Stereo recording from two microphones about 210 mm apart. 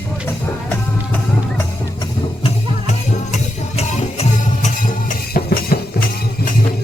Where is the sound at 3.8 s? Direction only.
30° left (ahead or behind).